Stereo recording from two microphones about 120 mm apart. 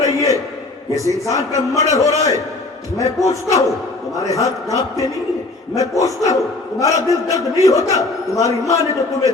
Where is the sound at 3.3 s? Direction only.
25° left (ahead or behind).